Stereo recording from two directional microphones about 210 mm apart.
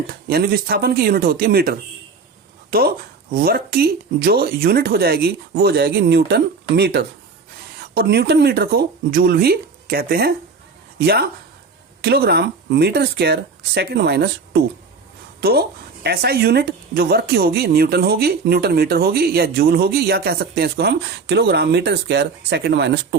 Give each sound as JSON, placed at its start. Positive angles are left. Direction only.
{"t": 0.1, "sound": "speech", "side_deg": -45}